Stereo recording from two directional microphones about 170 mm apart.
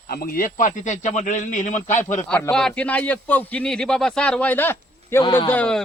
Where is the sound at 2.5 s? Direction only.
5° left (ahead or behind).